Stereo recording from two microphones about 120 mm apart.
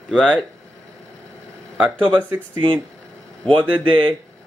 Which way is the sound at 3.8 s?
45° right (ahead or behind).